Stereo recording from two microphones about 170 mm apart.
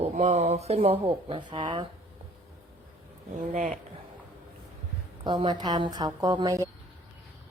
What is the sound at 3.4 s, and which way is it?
Speech, 50° right (ahead or behind).